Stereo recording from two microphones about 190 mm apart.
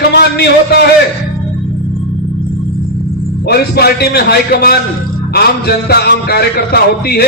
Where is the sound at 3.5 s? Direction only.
55° left (ahead or behind).